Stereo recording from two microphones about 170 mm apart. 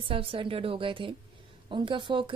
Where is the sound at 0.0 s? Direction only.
30° right (ahead or behind).